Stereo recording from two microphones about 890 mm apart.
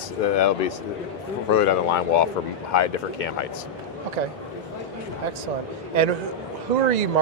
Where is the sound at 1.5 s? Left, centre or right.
Left.